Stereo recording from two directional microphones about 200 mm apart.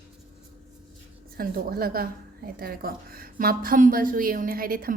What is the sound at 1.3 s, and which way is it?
A woman's voice, 50° right (ahead or behind).